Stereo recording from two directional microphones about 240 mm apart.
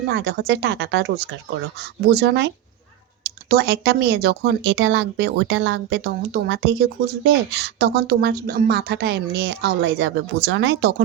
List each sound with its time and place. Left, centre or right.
0.1 s speech: right
3.5 s speech: right